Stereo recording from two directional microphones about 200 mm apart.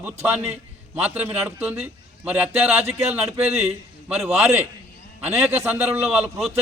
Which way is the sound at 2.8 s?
30° right (ahead or behind).